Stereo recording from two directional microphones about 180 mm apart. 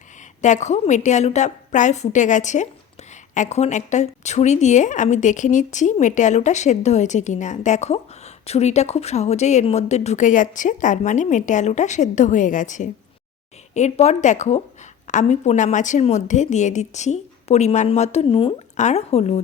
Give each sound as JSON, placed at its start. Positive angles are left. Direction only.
{"t": 0.4, "sound": "a woman's voice", "side_deg": 40}